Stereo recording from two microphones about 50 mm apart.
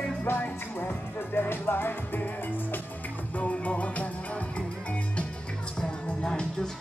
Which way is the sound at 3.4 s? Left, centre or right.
Left.